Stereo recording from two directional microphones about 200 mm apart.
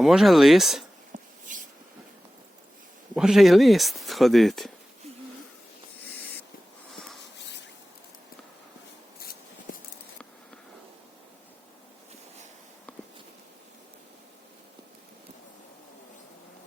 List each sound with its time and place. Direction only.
0.0 s speech: centre (ahead or behind)
1.1 s a sound: 40° right (ahead or behind)
3.2 s speech: centre (ahead or behind)